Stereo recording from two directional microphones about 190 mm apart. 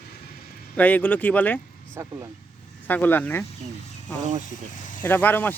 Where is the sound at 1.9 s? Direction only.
15° right (ahead or behind).